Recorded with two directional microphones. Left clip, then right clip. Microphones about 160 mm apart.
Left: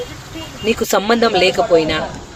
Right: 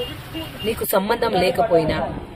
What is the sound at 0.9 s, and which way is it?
Speech, 40° left (ahead or behind).